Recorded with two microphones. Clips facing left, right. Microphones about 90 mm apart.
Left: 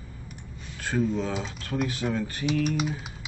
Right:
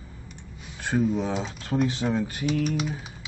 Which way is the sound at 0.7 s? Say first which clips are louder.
Right 2 dB; 20° right (ahead or behind).